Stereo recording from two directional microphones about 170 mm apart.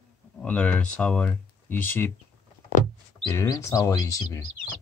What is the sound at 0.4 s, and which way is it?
Speech, 5° left (ahead or behind).